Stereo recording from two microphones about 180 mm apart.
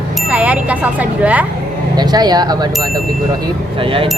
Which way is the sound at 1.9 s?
25° right (ahead or behind).